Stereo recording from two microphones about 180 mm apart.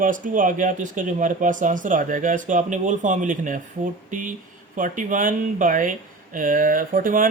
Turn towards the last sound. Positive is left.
turn(degrees=-50)  # may be behind; listen again after turning